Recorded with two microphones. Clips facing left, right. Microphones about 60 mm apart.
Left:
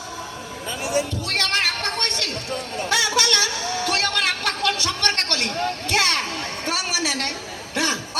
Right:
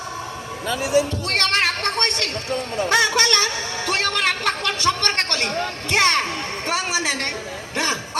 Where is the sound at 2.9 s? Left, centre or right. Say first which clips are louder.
Right 2 dB; right.